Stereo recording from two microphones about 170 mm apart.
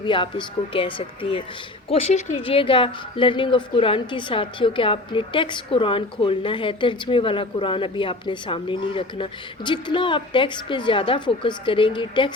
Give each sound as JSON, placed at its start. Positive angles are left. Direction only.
{"t": 0.0, "sound": "a woman's voice", "side_deg": 30}